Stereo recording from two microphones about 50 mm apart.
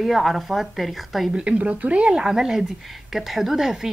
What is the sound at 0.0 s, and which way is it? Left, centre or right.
A woman's voice, centre.